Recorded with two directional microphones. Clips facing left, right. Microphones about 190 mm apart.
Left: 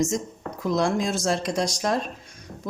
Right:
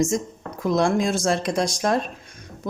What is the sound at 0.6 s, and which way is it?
A woman's voice, 55° right (ahead or behind).